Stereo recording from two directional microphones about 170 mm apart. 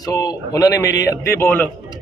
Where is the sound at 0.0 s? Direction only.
20° left (ahead or behind).